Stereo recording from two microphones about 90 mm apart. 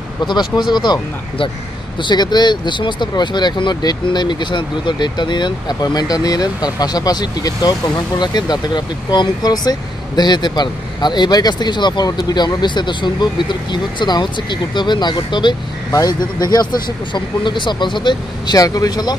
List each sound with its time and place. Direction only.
0.3 s speech: 55° left (ahead or behind)
15.9 s a man's voice: 40° left (ahead or behind)
17.1 s speech: 60° left (ahead or behind)
18.6 s speech: 45° left (ahead or behind)